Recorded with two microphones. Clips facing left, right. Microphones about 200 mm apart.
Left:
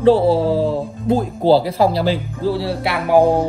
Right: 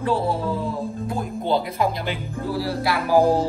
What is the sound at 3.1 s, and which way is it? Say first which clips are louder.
Music: left 4 dB; 60° left (ahead or behind).